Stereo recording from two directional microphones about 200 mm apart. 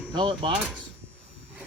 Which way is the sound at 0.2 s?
25° right (ahead or behind).